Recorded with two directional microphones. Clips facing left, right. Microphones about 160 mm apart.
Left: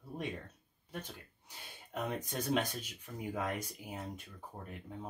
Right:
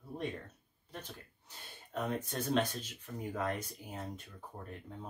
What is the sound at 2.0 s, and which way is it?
Speech, 10° left (ahead or behind).